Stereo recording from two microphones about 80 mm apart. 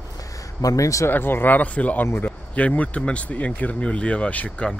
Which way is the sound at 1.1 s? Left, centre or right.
Left.